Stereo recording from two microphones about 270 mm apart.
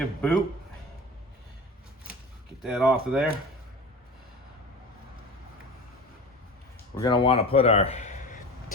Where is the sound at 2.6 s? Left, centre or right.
Centre.